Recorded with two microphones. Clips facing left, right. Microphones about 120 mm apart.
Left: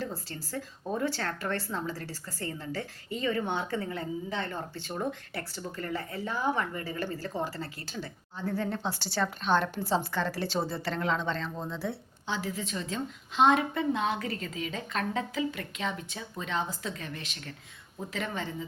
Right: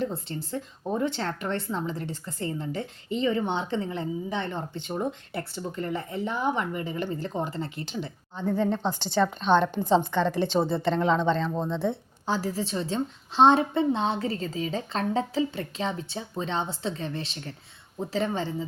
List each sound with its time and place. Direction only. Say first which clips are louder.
0.0 s a woman's voice: right 6 dB; 25° right (ahead or behind)
10.6 s a woman's voice: right 6 dB; 20° right (ahead or behind)
10.8 s speech: right 7 dB; centre (ahead or behind)
11.5 s a woman's voice: right 7 dB; 30° right (ahead or behind)
12.2 s a woman's voice: right 6 dB; 40° right (ahead or behind)